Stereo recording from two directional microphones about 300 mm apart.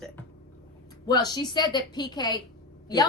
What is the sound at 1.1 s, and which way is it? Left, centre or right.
A woman's voice, centre.